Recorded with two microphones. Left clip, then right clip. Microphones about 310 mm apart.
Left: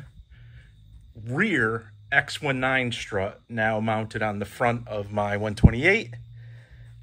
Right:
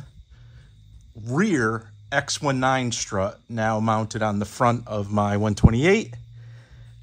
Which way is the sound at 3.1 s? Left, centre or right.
Right.